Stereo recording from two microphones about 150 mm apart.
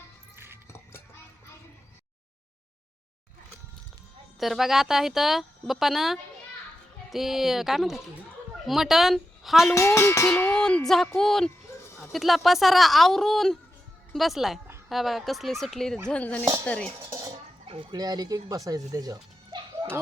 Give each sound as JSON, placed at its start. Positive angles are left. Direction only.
{"t": 0.3, "sound": "music", "side_deg": -15}
{"t": 4.4, "sound": "a woman's voice", "side_deg": 0}
{"t": 9.6, "sound": "a woman's voice", "side_deg": 20}
{"t": 17.0, "sound": "dishes", "side_deg": -20}
{"t": 17.3, "sound": "a sound", "side_deg": -40}
{"t": 17.9, "sound": "speech", "side_deg": -25}